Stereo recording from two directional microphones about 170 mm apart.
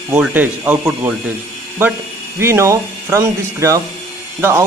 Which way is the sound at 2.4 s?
15° right (ahead or behind).